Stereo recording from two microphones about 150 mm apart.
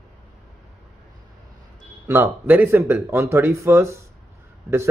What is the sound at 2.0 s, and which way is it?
Speech, 15° right (ahead or behind).